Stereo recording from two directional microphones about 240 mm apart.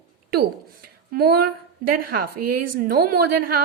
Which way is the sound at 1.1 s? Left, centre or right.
Right.